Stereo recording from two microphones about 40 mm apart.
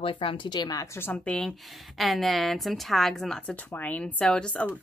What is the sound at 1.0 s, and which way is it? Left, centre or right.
Speech, left.